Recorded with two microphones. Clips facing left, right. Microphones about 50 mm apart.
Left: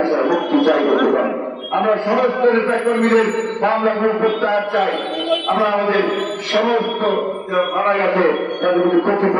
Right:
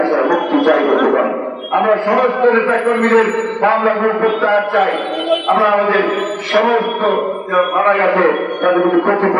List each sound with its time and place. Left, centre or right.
0.0 s music: centre
1.7 s a man's voice: right
3.0 s a man's voice: centre
3.6 s a man's voice: right
6.5 s a man's voice: centre